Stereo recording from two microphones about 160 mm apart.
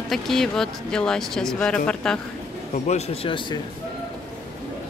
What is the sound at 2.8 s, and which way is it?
Speech, 45° left (ahead or behind).